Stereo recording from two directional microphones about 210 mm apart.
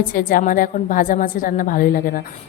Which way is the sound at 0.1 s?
40° left (ahead or behind).